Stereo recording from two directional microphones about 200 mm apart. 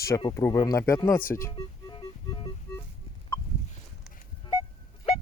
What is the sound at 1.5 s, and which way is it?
Music, 25° left (ahead or behind).